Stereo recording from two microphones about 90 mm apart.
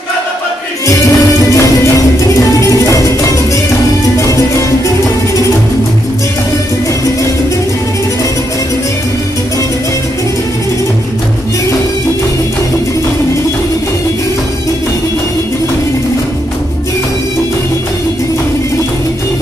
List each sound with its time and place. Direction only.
0.8 s music: 35° left (ahead or behind)